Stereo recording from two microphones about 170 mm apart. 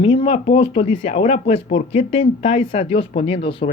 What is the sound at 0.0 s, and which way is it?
A woman's voice, 35° left (ahead or behind).